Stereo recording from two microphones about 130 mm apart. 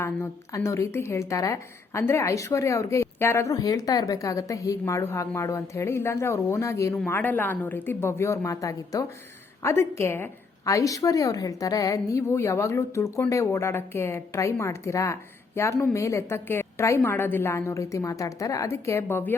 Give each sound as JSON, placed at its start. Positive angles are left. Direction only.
{"t": 0.0, "sound": "a woman's voice", "side_deg": 20}